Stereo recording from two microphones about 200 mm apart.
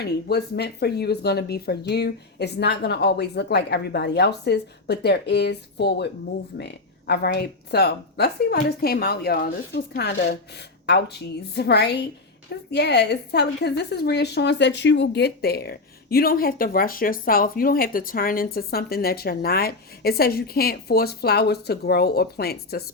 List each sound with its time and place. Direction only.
0.0 s speech: 55° left (ahead or behind)
7.1 s a woman's voice: 55° left (ahead or behind)